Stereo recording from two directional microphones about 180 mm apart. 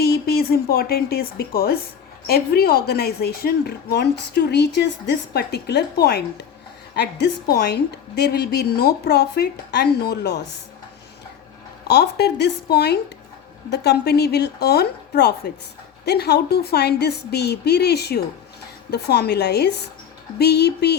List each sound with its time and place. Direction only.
0.0 s a woman's voice: 60° left (ahead or behind)
11.9 s a woman's voice: 65° left (ahead or behind)